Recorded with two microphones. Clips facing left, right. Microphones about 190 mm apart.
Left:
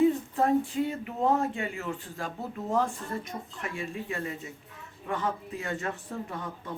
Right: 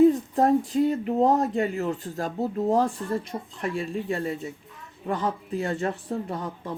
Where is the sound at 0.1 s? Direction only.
40° right (ahead or behind).